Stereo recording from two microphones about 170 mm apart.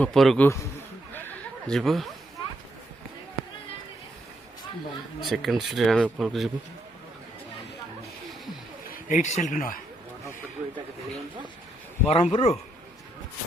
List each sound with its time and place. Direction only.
0.0 s speech: centre (ahead or behind)
0.4 s a man's voice: 15° left (ahead or behind)
1.1 s a sound: 10° left (ahead or behind)
5.2 s speech: centre (ahead or behind)
9.0 s speech: 45° left (ahead or behind)
12.0 s speech: 35° left (ahead or behind)